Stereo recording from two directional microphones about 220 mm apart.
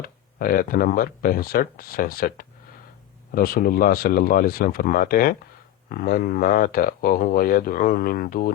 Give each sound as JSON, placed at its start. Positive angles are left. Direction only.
{"t": 0.0, "sound": "speech", "side_deg": 40}